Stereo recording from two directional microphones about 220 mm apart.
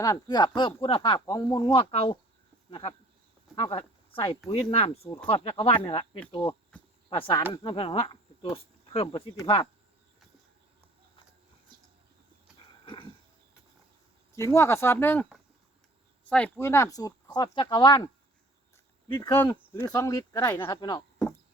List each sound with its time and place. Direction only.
0.0 s speech: 15° left (ahead or behind)
6.5 s a sound: 5° left (ahead or behind)
7.1 s speech: 25° left (ahead or behind)
12.8 s dog: 20° left (ahead or behind)
14.3 s speech: 10° left (ahead or behind)